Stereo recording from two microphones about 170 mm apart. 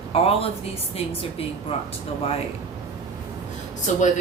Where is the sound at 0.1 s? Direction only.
35° left (ahead or behind).